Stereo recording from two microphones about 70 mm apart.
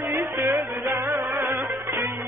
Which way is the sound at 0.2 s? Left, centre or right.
Right.